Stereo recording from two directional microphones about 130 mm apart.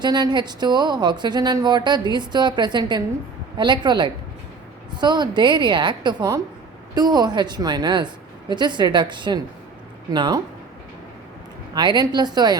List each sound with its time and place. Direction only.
0.0 s a woman's voice: 35° right (ahead or behind)
11.7 s a woman's voice: 35° right (ahead or behind)